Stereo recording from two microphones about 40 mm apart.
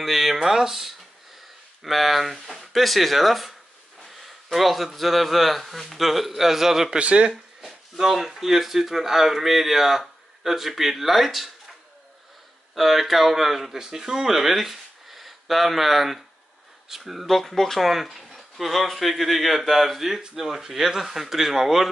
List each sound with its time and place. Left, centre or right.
0.0 s speech: centre
7.0 s speech: right
7.6 s speech: centre
12.7 s speech: centre
17.4 s speech: centre